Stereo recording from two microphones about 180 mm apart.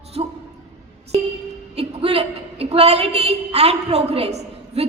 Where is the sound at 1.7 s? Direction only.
35° right (ahead or behind).